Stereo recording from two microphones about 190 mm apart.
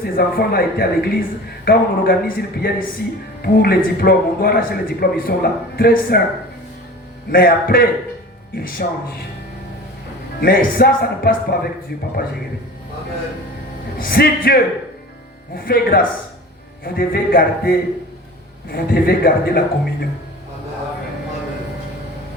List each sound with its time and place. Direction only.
0.0 s a man's voice: 55° left (ahead or behind)
7.3 s a man's voice: 50° left (ahead or behind)
10.4 s a man's voice: 50° left (ahead or behind)
14.0 s a man's voice: 50° left (ahead or behind)